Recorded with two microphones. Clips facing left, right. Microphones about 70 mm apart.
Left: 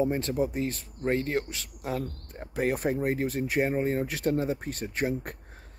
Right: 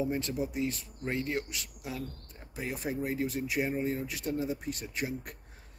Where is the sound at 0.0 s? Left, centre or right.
Left.